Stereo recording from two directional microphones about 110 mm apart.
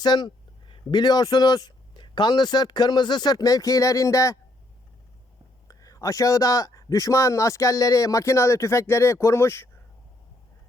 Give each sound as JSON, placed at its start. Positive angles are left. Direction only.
{"t": 0.0, "sound": "a man's voice", "side_deg": 40}
{"t": 5.6, "sound": "speech", "side_deg": 30}